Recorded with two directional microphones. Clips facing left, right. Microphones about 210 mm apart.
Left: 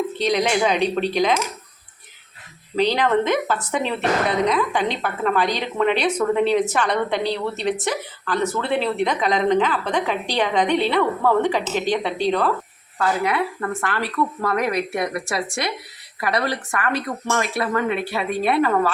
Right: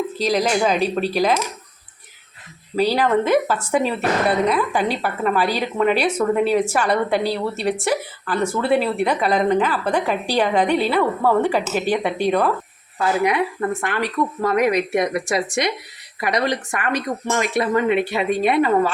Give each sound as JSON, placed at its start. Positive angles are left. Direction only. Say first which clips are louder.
{"t": 0.2, "sound": "speech", "louder": "right 1 dB", "side_deg": -5}
{"t": 2.7, "sound": "speech", "louder": "right 1 dB", "side_deg": -10}